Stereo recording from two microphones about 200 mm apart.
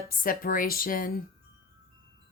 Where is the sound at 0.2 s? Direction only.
45° left (ahead or behind).